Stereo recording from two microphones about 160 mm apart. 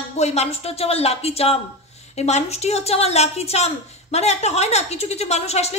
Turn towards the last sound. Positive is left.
turn(degrees=40)  # may be behind; listen again after turning